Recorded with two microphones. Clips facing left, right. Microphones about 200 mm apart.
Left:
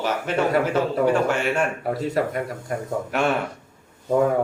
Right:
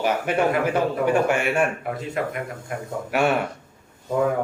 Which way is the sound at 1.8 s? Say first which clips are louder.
Left 4 dB; 35° left (ahead or behind).